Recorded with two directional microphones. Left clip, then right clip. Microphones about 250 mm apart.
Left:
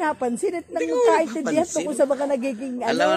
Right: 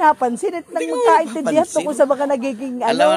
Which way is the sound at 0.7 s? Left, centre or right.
Right.